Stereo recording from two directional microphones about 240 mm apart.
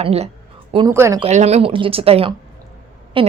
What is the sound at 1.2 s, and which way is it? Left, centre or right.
A woman's voice, right.